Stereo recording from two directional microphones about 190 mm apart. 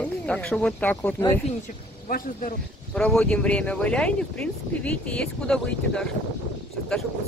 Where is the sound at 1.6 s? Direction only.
45° left (ahead or behind).